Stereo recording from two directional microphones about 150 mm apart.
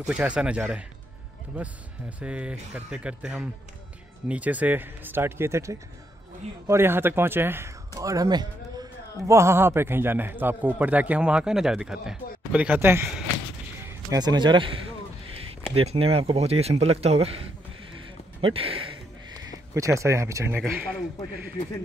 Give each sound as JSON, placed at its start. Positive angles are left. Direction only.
{"t": 0.0, "sound": "a man's voice", "side_deg": -10}
{"t": 13.8, "sound": "a man's voice", "side_deg": -25}
{"t": 18.4, "sound": "a sound", "side_deg": -40}
{"t": 19.7, "sound": "speech", "side_deg": -20}